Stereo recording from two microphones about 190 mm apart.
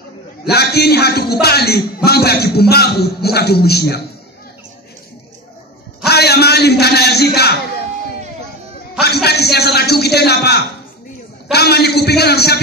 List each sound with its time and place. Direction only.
0.5 s a man's voice: 55° left (ahead or behind)
6.0 s a sound: 60° left (ahead or behind)
9.0 s a man's voice: 60° left (ahead or behind)